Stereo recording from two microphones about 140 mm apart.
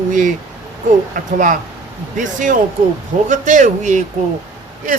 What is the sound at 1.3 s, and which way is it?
Speech, 70° right (ahead or behind).